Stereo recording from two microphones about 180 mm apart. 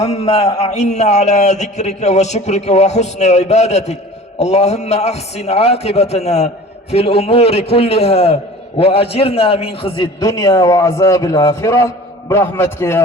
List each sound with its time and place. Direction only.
0.0 s a man's voice: 35° left (ahead or behind); by 13.0 s 15° left (ahead or behind)